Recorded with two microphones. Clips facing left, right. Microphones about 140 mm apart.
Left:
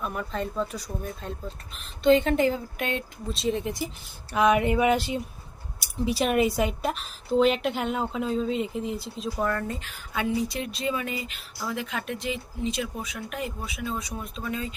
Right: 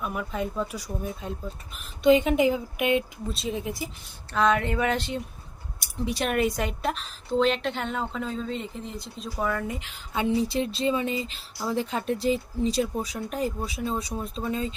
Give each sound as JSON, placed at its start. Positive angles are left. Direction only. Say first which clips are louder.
{"t": 0.0, "sound": "speech", "louder": "right 1 dB", "side_deg": -5}
{"t": 4.3, "sound": "a sound", "louder": "left 2 dB", "side_deg": 10}
{"t": 5.8, "sound": "speech", "louder": "left 3 dB", "side_deg": 0}
{"t": 9.6, "sound": "speech", "louder": "even", "side_deg": -15}